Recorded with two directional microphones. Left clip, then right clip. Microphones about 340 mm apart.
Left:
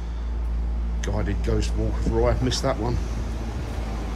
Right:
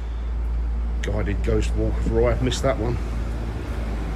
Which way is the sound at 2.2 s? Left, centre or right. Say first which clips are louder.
Right 2 dB; centre.